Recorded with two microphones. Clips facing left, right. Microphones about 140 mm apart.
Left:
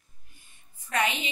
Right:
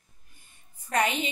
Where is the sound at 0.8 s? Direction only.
45° right (ahead or behind).